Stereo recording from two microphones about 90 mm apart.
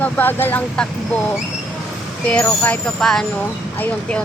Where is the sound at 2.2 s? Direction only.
15° left (ahead or behind).